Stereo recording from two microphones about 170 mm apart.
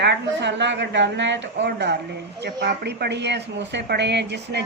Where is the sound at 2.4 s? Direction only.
75° right (ahead or behind).